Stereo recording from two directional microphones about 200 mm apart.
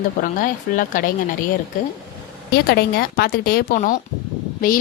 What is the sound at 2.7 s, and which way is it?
Speech, 50° left (ahead or behind).